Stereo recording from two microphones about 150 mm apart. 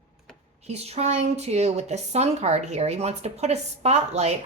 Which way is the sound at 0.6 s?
45° right (ahead or behind).